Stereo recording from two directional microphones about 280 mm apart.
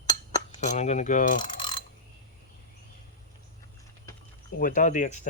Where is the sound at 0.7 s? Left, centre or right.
Left.